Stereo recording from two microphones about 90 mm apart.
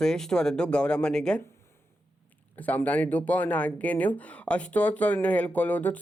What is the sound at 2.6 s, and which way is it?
Speech, 20° left (ahead or behind).